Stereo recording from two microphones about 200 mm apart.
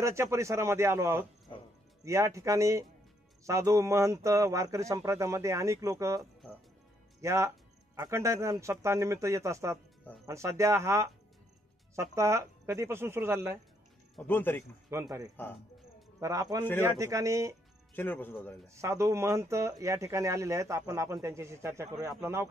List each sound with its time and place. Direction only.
0.0 s speech: 15° right (ahead or behind)
14.1 s speech: 10° left (ahead or behind)
14.9 s speech: 15° right (ahead or behind)
17.9 s speech: 10° left (ahead or behind)
18.8 s speech: 15° right (ahead or behind)